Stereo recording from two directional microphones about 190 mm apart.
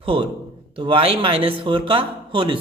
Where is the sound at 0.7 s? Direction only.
25° right (ahead or behind).